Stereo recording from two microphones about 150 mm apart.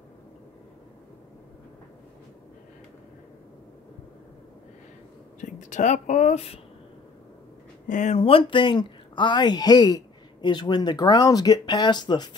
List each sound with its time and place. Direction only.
5.4 s speech: 55° left (ahead or behind)
7.9 s speech: 55° left (ahead or behind)
8.2 s speech: 35° left (ahead or behind)